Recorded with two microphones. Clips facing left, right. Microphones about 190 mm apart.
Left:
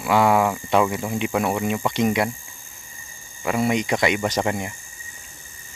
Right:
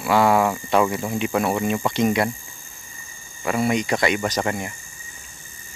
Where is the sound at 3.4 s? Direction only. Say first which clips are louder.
Even; 15° left (ahead or behind).